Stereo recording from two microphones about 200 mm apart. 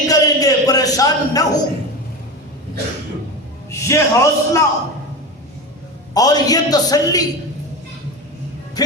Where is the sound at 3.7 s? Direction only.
15° left (ahead or behind).